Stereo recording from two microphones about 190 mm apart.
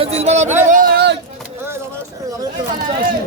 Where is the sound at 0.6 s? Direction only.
45° right (ahead or behind).